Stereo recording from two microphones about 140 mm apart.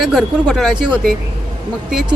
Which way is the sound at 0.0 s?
5° right (ahead or behind).